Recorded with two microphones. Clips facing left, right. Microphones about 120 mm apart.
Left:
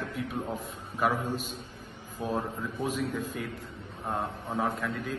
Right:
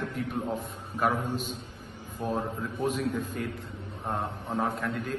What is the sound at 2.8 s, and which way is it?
Speech, 45° right (ahead or behind).